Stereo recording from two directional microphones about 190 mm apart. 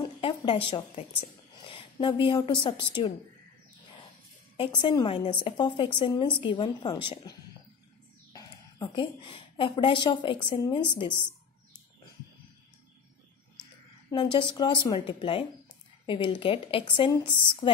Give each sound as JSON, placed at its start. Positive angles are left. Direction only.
{"t": 0.0, "sound": "a woman's voice", "side_deg": 25}
{"t": 4.6, "sound": "a woman's voice", "side_deg": 25}
{"t": 14.1, "sound": "a woman's voice", "side_deg": 25}